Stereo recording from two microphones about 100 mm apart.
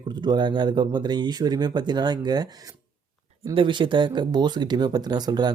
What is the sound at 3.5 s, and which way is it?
Speech, 55° right (ahead or behind).